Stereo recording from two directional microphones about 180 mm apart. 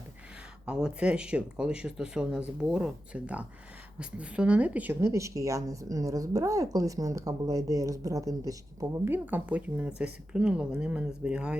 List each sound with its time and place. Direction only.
0.6 s a woman's voice: 5° right (ahead or behind)